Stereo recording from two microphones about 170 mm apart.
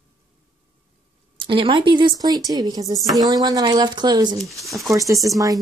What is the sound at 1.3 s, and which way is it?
Speech, 30° right (ahead or behind).